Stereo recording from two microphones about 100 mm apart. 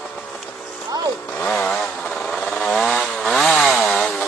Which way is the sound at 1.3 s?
5° left (ahead or behind).